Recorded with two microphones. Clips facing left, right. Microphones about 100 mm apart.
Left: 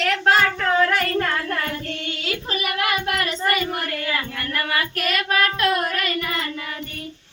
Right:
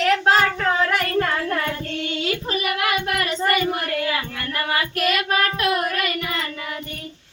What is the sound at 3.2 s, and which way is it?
Child singing, 15° right (ahead or behind).